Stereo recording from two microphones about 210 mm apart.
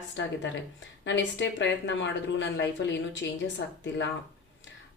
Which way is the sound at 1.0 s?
60° left (ahead or behind).